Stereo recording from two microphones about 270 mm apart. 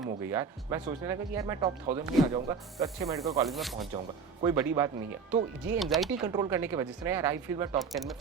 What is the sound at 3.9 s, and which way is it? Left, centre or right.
Speech, centre.